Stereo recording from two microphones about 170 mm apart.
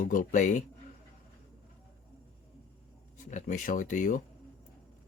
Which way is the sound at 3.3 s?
45° left (ahead or behind).